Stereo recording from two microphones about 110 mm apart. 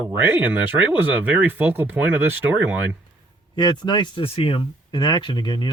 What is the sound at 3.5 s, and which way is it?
Speech, 45° left (ahead or behind).